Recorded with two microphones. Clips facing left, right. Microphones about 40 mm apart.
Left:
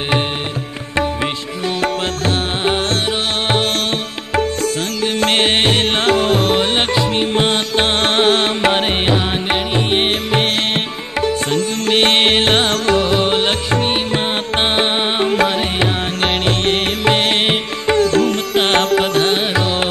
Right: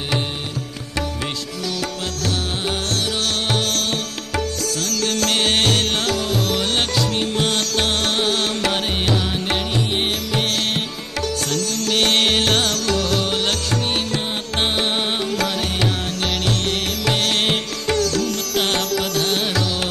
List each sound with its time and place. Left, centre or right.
1.8 s music: left
5.0 s music: left